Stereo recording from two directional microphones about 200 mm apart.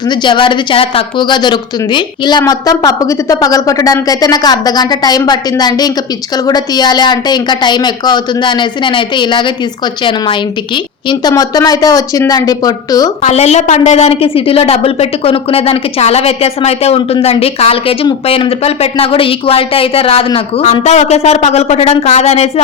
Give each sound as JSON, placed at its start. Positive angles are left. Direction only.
{"t": 0.1, "sound": "a woman's voice", "side_deg": 25}
{"t": 13.2, "sound": "a woman's voice", "side_deg": 35}